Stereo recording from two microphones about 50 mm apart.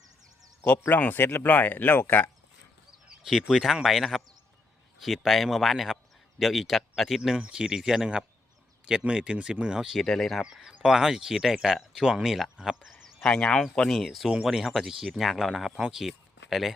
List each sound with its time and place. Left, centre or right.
0.9 s speech: left
3.2 s speech: centre
7.2 s speech: centre
9.0 s speech: right
9.9 s speech: centre
10.4 s speech: centre
13.2 s speech: centre
13.9 s speech: centre